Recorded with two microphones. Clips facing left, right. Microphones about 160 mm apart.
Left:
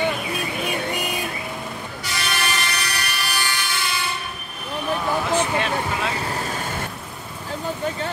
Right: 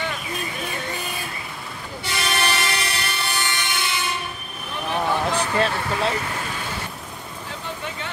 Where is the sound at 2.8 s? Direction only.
25° right (ahead or behind).